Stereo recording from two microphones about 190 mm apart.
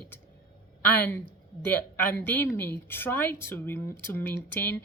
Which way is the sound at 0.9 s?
10° left (ahead or behind).